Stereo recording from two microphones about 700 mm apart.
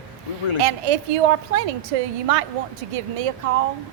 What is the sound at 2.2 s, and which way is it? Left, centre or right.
A woman's voice, right.